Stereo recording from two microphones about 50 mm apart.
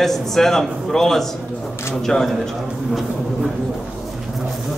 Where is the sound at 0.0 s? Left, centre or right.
Centre.